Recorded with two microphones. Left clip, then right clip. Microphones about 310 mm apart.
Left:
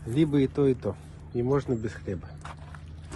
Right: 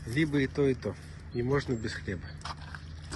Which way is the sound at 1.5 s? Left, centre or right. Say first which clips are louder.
Left 2 dB; centre.